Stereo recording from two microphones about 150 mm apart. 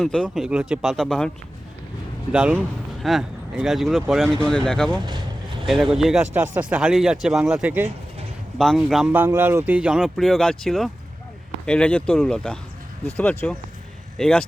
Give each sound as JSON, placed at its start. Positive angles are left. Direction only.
{"t": 0.0, "sound": "speech", "side_deg": 0}
{"t": 2.3, "sound": "speech", "side_deg": -10}
{"t": 4.9, "sound": "speech", "side_deg": -30}
{"t": 5.6, "sound": "speech", "side_deg": 0}
{"t": 9.0, "sound": "speech", "side_deg": -15}